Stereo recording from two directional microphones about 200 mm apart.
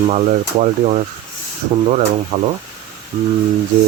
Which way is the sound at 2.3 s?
35° right (ahead or behind).